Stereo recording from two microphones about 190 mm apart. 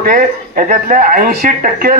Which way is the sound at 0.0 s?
45° right (ahead or behind).